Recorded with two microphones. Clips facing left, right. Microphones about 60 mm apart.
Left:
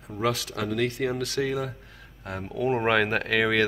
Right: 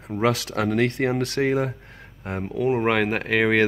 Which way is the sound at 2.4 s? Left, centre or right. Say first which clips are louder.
Right 3 dB; centre.